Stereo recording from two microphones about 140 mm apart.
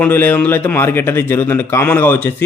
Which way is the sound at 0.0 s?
15° left (ahead or behind).